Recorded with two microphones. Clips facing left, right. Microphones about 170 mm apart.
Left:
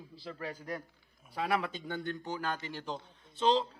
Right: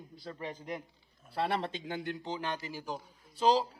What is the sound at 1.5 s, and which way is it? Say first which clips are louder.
Speech: left 2 dB; 30° right (ahead or behind).